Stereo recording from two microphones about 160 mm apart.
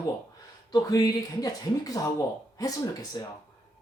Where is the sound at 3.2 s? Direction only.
25° left (ahead or behind).